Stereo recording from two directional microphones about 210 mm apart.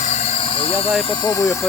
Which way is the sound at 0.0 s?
30° left (ahead or behind).